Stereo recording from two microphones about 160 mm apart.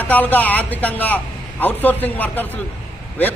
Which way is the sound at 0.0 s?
10° left (ahead or behind).